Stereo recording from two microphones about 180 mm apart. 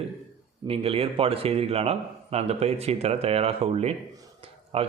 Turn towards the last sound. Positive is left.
turn(degrees=-35)  # may be behind; listen again after turning